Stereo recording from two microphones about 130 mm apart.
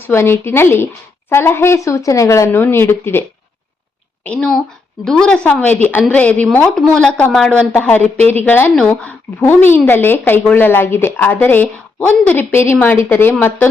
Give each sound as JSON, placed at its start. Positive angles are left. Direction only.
{"t": 0.1, "sound": "a woman's voice", "side_deg": 20}